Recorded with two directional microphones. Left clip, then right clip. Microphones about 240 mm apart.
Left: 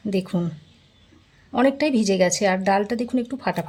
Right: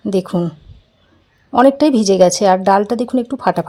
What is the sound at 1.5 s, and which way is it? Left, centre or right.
A woman's voice, centre.